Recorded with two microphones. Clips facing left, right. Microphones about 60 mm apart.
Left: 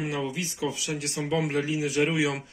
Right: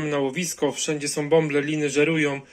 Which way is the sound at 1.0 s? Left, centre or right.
Right.